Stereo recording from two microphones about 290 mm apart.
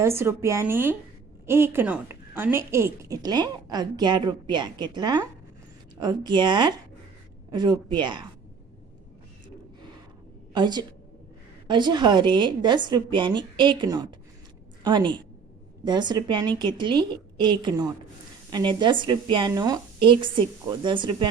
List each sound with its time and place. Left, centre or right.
0.0 s a woman's voice: centre
10.5 s a woman's voice: centre